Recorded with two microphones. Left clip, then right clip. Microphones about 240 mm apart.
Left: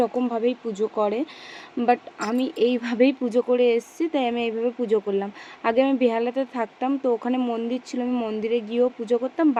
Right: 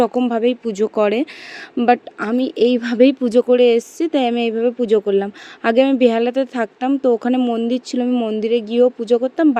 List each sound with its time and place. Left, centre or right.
0.0 s speech: right
1.8 s speech: right